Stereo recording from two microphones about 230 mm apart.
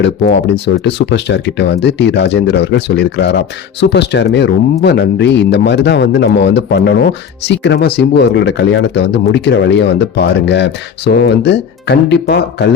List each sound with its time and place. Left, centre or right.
0.0 s speech: left